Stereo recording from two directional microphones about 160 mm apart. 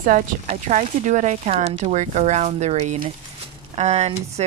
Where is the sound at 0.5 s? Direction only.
45° right (ahead or behind).